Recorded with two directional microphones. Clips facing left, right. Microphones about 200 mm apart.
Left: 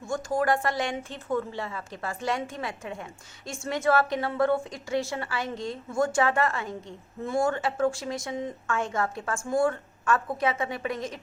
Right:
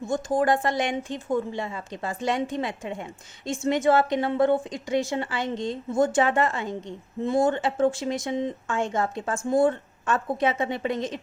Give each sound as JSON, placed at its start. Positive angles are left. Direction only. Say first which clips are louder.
{"t": 0.0, "sound": "speech", "louder": "right 3 dB", "side_deg": -20}